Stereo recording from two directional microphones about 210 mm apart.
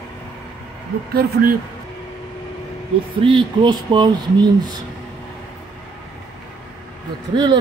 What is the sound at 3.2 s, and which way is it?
Speech, 20° right (ahead or behind).